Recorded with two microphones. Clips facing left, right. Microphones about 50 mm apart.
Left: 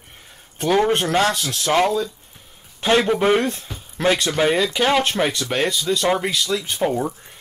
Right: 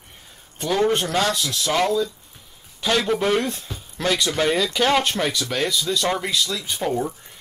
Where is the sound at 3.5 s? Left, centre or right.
Left.